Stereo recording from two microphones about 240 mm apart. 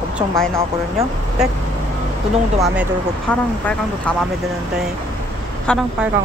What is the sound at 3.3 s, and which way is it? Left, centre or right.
Speech, centre.